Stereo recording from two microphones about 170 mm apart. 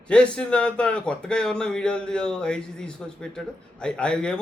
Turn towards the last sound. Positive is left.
turn(degrees=5)  # may be behind; listen again after turning